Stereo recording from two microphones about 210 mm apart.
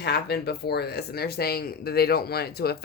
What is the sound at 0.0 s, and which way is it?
Speech, 50° left (ahead or behind).